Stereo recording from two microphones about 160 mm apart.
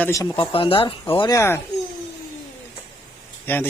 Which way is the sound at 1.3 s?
15° left (ahead or behind).